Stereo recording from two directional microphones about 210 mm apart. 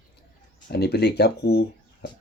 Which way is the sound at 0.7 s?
50° left (ahead or behind).